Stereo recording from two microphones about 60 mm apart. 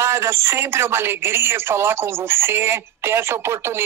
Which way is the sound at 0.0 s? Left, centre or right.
Right.